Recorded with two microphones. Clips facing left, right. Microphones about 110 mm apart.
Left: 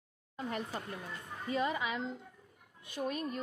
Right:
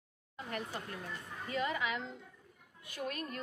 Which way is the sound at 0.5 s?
25° left (ahead or behind).